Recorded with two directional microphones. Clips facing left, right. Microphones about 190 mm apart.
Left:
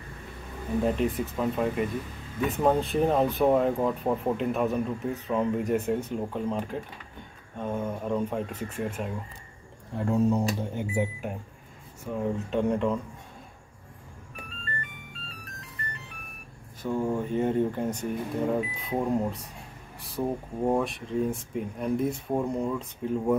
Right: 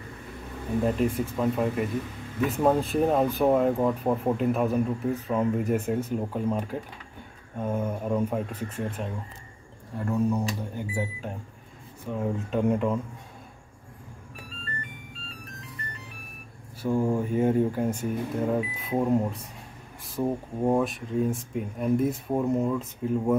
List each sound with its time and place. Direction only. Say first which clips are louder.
0.8 s speech: right 1 dB; centre (ahead or behind)
10.0 s speech: left 2 dB; 25° left (ahead or behind)
12.1 s speech: even; 5° right (ahead or behind)
16.8 s speech: right 3 dB; 10° right (ahead or behind)